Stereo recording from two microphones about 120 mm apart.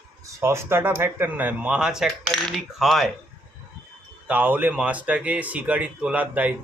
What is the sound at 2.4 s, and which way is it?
Cutlery, centre (ahead or behind).